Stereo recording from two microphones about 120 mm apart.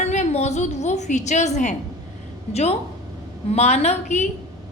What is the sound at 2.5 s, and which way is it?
A woman's voice, 65° left (ahead or behind).